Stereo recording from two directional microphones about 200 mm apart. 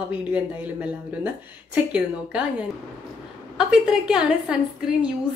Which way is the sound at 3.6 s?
5° right (ahead or behind).